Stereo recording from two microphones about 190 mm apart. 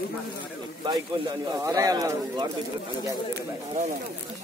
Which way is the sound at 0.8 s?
20° right (ahead or behind).